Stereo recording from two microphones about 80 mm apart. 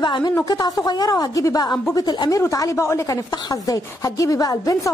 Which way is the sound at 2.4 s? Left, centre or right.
Left.